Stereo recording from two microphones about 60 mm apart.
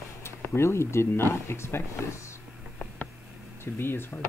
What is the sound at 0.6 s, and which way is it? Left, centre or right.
Speech, left.